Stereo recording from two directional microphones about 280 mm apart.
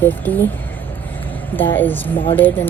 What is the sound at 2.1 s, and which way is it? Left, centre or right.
Speech, centre.